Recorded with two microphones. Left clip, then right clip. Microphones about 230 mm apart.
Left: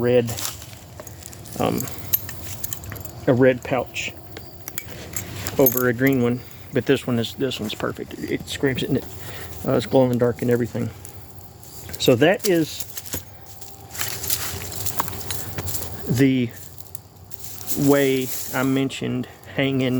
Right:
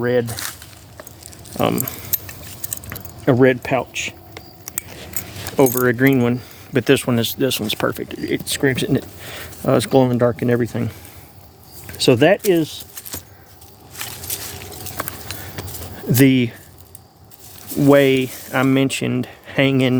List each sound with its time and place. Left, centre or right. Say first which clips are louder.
0.3 s speech: right 2 dB; centre
1.5 s speech: right 4 dB; right
2.6 s a sound: right 3 dB; right
5.5 s speech: right 4 dB; right
13.0 s keys jangling: even; centre
13.9 s walk: left 2 dB; centre
15.6 s keys jangling: even; centre
16.1 s speech: right 5 dB; right
17.8 s speech: right 5 dB; right